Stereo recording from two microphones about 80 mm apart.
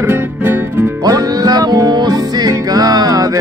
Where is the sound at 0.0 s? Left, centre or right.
Right.